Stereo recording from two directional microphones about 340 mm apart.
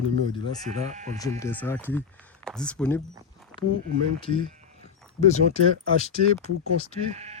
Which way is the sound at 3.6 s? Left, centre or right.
Centre.